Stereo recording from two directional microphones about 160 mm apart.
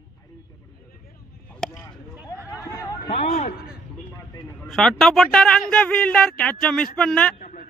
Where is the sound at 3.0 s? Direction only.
45° left (ahead or behind).